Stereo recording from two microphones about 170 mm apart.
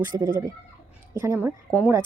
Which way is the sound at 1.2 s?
10° right (ahead or behind).